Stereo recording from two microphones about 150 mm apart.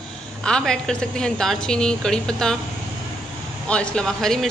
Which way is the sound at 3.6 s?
5° left (ahead or behind).